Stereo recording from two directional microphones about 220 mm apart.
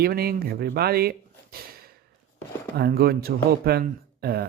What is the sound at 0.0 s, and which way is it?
Speech, 45° right (ahead or behind).